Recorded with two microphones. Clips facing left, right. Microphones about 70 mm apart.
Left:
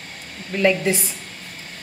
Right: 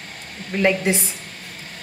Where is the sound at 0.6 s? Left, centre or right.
Right.